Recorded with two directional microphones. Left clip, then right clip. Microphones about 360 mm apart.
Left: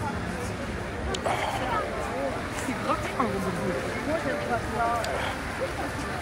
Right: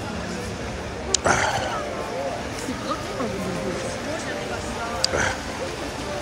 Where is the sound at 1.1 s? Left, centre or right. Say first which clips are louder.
Right 8 dB; right.